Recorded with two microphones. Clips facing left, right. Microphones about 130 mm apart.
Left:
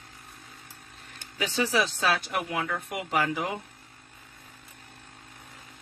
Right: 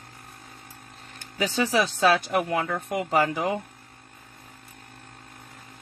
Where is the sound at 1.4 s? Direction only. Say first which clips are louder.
Right 3 dB; 40° right (ahead or behind).